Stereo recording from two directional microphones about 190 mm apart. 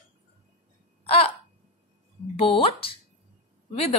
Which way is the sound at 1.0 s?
30° left (ahead or behind).